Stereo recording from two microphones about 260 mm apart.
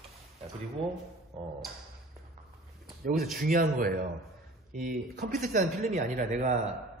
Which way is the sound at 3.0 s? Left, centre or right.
Right.